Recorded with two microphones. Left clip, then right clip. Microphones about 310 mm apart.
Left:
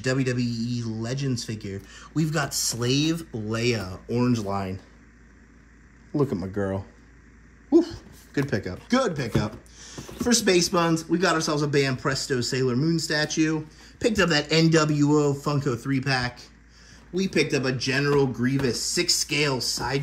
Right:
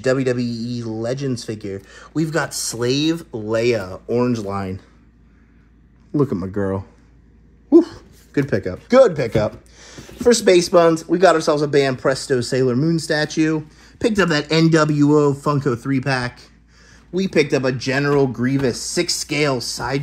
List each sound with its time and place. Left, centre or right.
0.0 s speech: centre
4.5 s speech: right
7.7 s speech: centre